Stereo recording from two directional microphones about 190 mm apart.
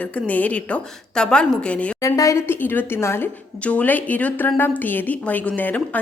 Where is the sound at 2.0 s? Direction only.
15° left (ahead or behind).